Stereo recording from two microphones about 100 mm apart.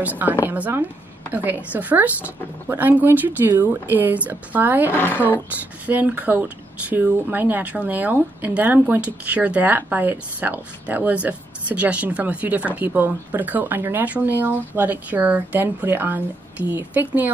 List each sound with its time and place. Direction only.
0.0 s speech: 15° right (ahead or behind)
4.9 s a woman's voice: 20° left (ahead or behind)
5.9 s speech: 15° right (ahead or behind)